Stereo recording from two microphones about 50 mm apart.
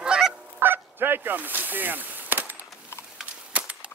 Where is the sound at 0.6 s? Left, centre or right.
Right.